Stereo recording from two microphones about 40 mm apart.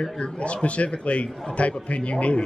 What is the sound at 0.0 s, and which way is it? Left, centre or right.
A man's voice, left.